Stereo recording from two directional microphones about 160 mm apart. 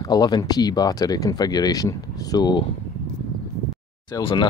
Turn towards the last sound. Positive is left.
turn(degrees=30)  # may be behind; listen again after turning